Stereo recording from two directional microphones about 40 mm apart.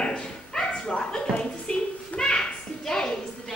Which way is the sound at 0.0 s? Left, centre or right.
Centre.